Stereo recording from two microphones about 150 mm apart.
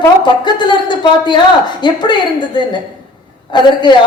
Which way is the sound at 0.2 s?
30° left (ahead or behind).